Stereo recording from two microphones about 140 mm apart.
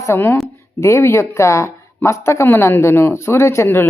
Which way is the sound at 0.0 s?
15° left (ahead or behind).